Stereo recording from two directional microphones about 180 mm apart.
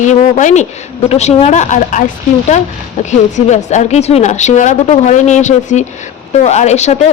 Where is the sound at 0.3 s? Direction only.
40° left (ahead or behind).